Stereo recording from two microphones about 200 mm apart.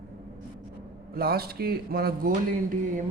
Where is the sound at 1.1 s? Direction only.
50° right (ahead or behind).